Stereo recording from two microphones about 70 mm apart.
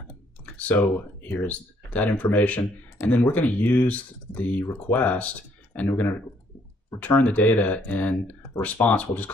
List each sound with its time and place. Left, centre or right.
0.6 s speech: left